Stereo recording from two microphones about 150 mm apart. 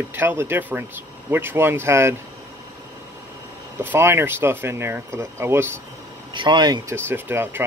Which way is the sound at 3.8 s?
15° right (ahead or behind).